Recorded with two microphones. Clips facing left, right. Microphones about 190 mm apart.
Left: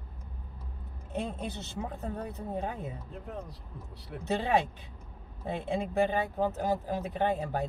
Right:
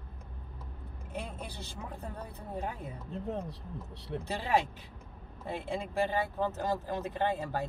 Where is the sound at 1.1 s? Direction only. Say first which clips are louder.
Left 6 dB; 20° left (ahead or behind).